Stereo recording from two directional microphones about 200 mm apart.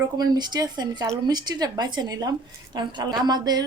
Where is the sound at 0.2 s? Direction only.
20° right (ahead or behind).